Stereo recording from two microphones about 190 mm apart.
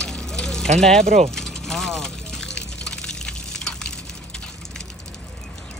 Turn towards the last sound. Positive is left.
turn(degrees=5)  # may be behind; listen again after turning